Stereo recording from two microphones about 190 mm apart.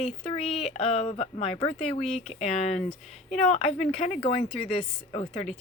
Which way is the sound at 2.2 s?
35° left (ahead or behind).